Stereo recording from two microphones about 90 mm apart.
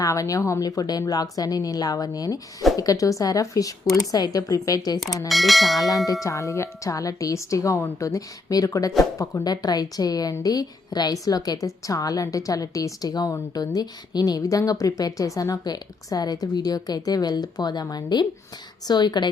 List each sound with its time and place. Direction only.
0.0 s speech: 40° left (ahead or behind)
5.3 s speech: centre (ahead or behind)
6.2 s speech: 35° left (ahead or behind); by 19.3 s 55° left (ahead or behind)